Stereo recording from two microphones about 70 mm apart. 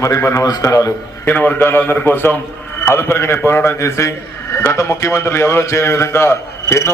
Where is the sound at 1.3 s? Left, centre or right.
Left.